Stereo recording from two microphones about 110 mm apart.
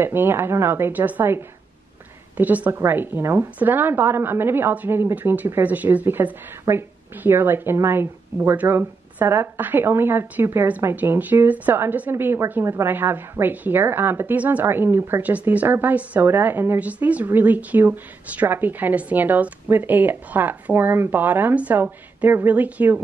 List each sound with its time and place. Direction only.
0.0 s a woman's voice: 20° right (ahead or behind)